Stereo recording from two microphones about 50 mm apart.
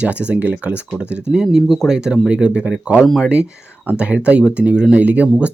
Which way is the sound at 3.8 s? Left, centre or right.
Right.